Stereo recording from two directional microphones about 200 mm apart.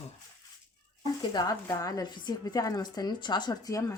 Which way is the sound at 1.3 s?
20° left (ahead or behind).